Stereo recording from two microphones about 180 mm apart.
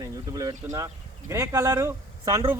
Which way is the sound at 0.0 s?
20° right (ahead or behind).